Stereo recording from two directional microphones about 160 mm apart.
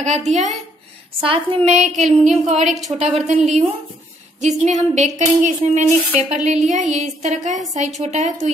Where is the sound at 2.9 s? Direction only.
30° right (ahead or behind).